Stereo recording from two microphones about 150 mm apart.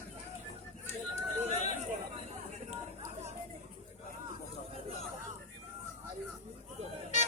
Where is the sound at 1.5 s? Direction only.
50° left (ahead or behind).